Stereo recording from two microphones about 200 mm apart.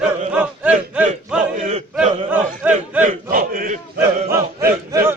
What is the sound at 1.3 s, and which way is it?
Battle cry, 5° right (ahead or behind).